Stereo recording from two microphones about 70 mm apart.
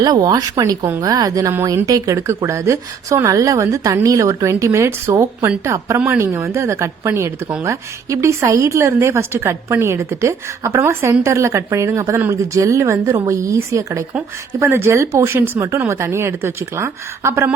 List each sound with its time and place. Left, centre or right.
0.0 s speech: right
2.1 s a woman's voice: right